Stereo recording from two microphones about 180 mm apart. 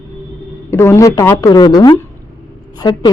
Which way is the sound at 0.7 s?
15° left (ahead or behind).